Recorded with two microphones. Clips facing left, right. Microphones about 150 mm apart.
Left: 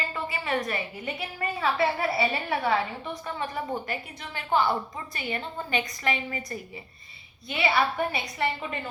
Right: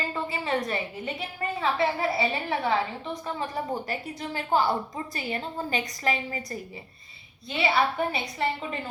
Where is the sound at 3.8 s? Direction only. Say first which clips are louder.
Right 3 dB; 40° right (ahead or behind).